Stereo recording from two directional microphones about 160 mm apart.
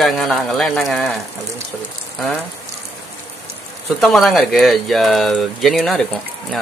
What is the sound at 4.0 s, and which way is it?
Speech, centre (ahead or behind).